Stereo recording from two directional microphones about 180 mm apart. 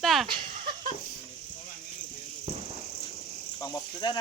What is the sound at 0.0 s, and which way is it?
Speech, centre (ahead or behind).